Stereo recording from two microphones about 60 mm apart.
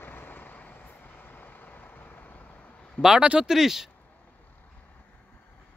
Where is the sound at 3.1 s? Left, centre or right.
Centre.